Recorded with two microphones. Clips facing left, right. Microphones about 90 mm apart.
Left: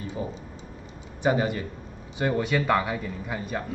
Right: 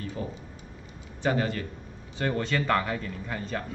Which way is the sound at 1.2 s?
15° left (ahead or behind).